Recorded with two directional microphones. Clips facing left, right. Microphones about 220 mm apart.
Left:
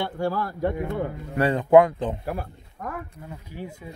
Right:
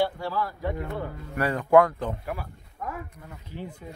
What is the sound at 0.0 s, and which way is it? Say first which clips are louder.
Speech: left 1 dB; 50° left (ahead or behind).